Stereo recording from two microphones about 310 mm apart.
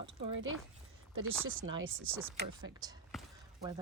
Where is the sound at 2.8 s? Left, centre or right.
Centre.